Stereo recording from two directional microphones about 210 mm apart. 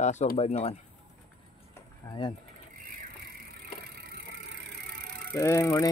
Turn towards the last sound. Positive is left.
turn(degrees=15)  # may be behind; listen again after turning